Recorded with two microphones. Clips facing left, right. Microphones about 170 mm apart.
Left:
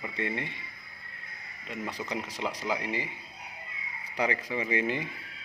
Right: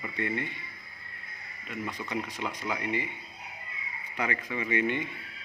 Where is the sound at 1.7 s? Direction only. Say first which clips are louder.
Even; 30° left (ahead or behind).